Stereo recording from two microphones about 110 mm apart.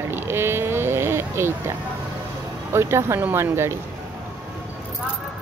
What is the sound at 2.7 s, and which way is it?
Speech, 25° right (ahead or behind).